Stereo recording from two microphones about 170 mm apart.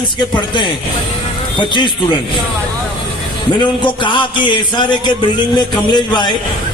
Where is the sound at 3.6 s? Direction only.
30° left (ahead or behind).